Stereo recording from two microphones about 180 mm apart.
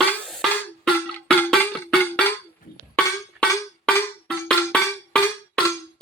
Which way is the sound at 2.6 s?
50° left (ahead or behind).